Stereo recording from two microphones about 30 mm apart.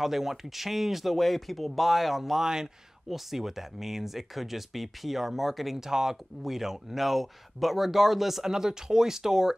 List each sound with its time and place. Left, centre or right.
0.0 s speech: centre
2.4 s speech: centre
5.8 s speech: centre